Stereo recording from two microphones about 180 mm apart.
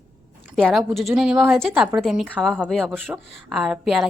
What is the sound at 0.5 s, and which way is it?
Speech, centre (ahead or behind).